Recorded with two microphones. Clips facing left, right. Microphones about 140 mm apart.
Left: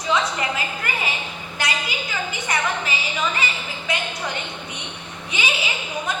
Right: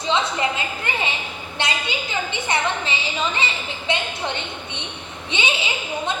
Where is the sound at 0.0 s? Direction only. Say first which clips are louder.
Right 1 dB; 25° right (ahead or behind).